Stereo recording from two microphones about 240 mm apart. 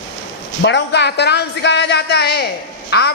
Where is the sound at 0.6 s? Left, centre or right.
Left.